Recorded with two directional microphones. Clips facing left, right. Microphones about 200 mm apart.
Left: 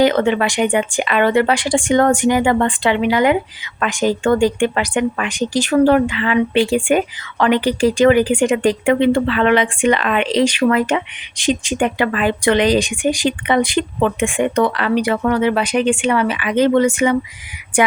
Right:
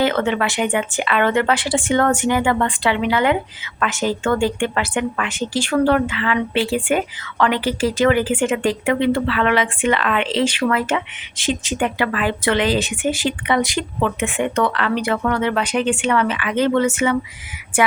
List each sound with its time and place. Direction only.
0.2 s speech: 20° left (ahead or behind)
2.4 s speech: 25° left (ahead or behind)